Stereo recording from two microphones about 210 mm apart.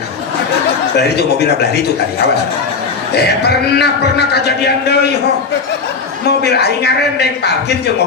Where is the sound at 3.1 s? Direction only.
50° left (ahead or behind).